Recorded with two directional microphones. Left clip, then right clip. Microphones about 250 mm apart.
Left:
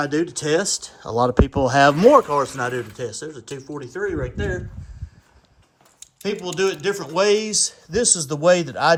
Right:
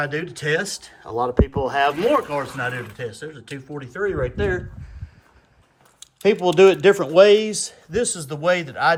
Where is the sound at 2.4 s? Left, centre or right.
Centre.